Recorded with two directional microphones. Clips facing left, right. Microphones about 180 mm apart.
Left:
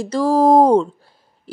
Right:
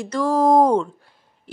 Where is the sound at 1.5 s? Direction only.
35° left (ahead or behind).